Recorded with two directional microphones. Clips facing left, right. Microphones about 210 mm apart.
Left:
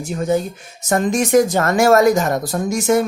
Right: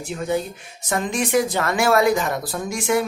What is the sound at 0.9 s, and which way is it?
Speech, 45° left (ahead or behind).